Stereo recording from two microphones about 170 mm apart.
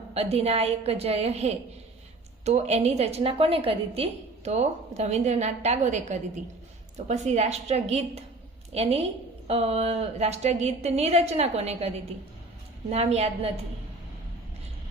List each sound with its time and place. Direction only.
0.1 s a woman's voice: 35° right (ahead or behind)